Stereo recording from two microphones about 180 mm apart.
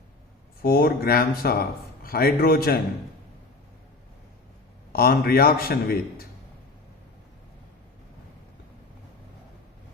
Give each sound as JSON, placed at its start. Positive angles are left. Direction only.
{"t": 0.6, "sound": "a man's voice", "side_deg": 55}
{"t": 4.9, "sound": "a man's voice", "side_deg": 55}